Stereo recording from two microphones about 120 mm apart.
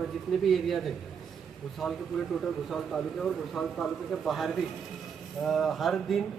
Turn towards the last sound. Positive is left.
turn(degrees=0)  # may be behind; listen again after turning